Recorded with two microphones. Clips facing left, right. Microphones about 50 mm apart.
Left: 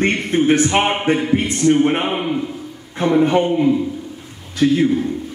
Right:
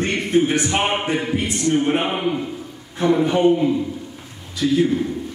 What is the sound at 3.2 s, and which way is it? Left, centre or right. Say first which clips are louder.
A man's voice: left 1 dB; left.